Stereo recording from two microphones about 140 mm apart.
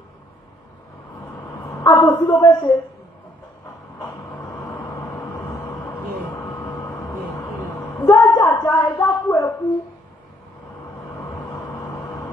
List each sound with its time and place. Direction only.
1.7 s a woman's voice: 25° left (ahead or behind)
4.6 s vehicle: 10° left (ahead or behind)
6.6 s a sound: 30° left (ahead or behind)
7.4 s music: 10° left (ahead or behind)
8.1 s a sound: 30° left (ahead or behind)
8.9 s speech: 20° left (ahead or behind)